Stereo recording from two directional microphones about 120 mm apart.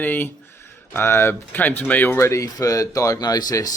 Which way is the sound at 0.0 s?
15° left (ahead or behind).